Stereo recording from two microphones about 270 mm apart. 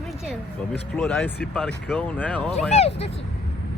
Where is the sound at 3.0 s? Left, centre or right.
Left.